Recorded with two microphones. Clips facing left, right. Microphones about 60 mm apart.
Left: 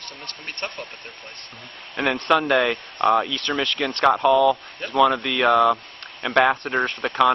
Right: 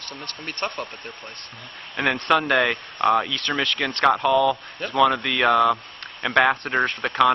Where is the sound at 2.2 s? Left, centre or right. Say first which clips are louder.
Left 1 dB; centre.